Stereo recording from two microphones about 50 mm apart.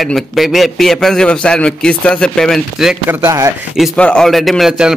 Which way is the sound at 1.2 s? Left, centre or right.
Centre.